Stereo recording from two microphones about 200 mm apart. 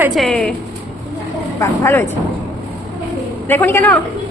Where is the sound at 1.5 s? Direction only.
10° left (ahead or behind).